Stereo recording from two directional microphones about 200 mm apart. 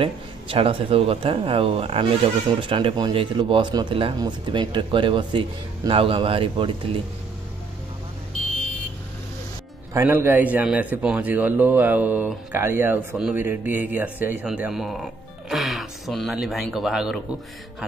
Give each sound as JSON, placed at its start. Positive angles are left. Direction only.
{"t": 0.0, "sound": "speech", "side_deg": -25}
{"t": 9.9, "sound": "a man's voice", "side_deg": -10}